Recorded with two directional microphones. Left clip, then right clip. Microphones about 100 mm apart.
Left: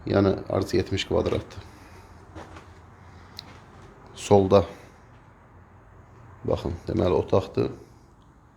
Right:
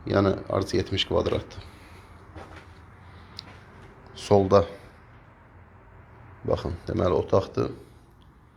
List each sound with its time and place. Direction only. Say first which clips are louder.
0.0 s speech: left 1 dB; 50° left (ahead or behind)
3.4 s a sound: even; 55° left (ahead or behind)
4.0 s speech: left 2 dB; 70° left (ahead or behind)
6.4 s speech: even; 45° left (ahead or behind)